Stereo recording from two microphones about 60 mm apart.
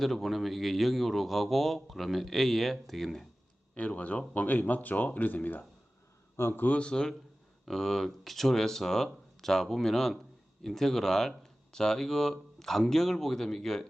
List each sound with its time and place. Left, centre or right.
0.0 s a man's voice: centre
3.8 s a man's voice: left; by 13.8 s centre